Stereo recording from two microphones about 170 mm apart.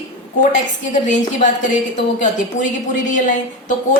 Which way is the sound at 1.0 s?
45° left (ahead or behind).